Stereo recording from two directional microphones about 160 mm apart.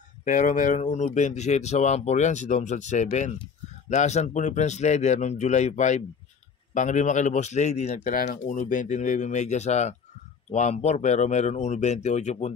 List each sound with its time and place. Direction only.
0.2 s speech: 55° left (ahead or behind)